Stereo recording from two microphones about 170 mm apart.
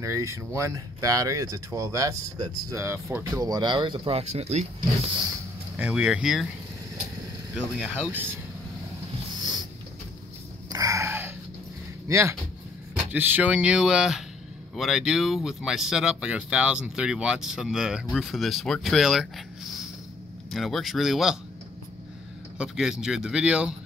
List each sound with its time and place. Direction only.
0.0 s speech: 15° right (ahead or behind); by 5.1 s 40° right (ahead or behind)
5.8 s speech: 5° right (ahead or behind)
7.5 s speech: 5° right (ahead or behind)
10.7 s a sound: 20° right (ahead or behind)
12.1 s speech: 15° right (ahead or behind)
20.5 s speech: centre (ahead or behind)
22.6 s speech: 5° right (ahead or behind)